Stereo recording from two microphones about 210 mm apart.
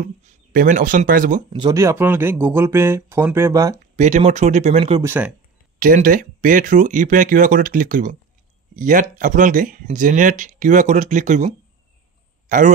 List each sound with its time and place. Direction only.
0.0 s speech: 35° right (ahead or behind)
1.5 s speech: 20° right (ahead or behind)
3.8 s speech: 35° right (ahead or behind)
5.0 s speech: 10° right (ahead or behind)
5.8 s speech: 40° right (ahead or behind)